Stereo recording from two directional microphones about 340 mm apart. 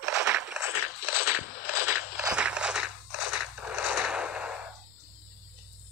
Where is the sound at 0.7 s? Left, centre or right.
Left.